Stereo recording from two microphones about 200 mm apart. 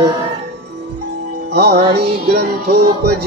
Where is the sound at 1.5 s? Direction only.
55° right (ahead or behind).